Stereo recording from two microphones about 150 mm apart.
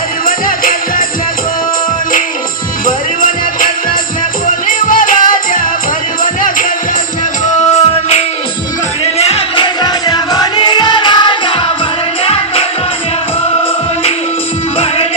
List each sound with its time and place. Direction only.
0.3 s music: 65° left (ahead or behind)
2.8 s music: 65° left (ahead or behind)
7.4 s music: 50° left (ahead or behind)
9.8 s music: 25° left (ahead or behind)